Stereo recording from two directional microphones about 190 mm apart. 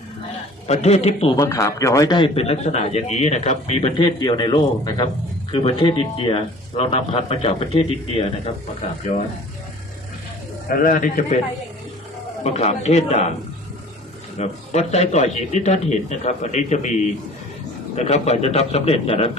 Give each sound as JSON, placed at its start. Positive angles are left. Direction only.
{"t": 0.7, "sound": "a man's voice", "side_deg": 35}
{"t": 1.4, "sound": "a man's voice", "side_deg": 15}
{"t": 8.8, "sound": "a man's voice", "side_deg": 40}
{"t": 10.7, "sound": "a man's voice", "side_deg": 45}
{"t": 12.4, "sound": "a man's voice", "side_deg": 35}
{"t": 14.3, "sound": "a man's voice", "side_deg": 35}